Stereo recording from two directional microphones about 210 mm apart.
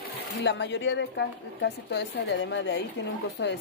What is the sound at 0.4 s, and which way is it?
Speech, 55° left (ahead or behind).